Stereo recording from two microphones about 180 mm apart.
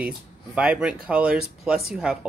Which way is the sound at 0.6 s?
5° right (ahead or behind).